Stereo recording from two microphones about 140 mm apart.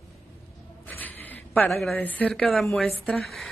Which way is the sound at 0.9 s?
15° left (ahead or behind).